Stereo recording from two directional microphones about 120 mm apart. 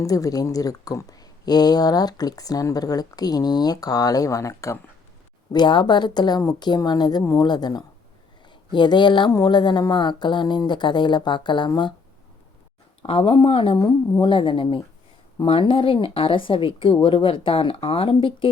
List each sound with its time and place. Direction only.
0.0 s speech: 30° left (ahead or behind)
5.5 s speech: 40° left (ahead or behind)
13.0 s a woman's voice: 45° left (ahead or behind)